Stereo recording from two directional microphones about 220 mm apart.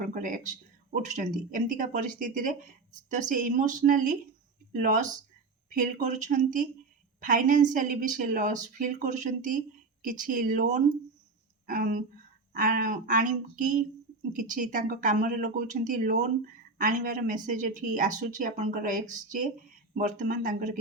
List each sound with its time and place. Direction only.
0.0 s speech: 40° right (ahead or behind)